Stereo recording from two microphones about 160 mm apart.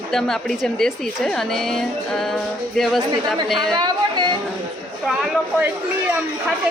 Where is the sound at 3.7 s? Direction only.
30° right (ahead or behind).